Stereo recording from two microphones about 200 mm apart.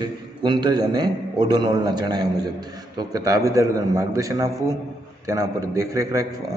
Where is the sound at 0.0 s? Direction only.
20° right (ahead or behind).